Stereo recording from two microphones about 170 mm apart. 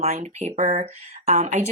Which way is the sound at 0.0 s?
40° right (ahead or behind).